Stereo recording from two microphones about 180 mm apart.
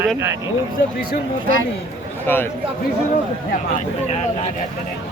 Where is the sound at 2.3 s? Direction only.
10° left (ahead or behind).